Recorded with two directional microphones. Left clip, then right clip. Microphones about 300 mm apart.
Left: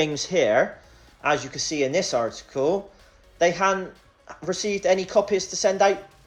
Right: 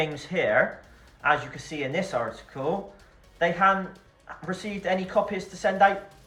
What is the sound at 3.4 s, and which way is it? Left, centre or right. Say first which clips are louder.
Speech: left 1 dB; centre.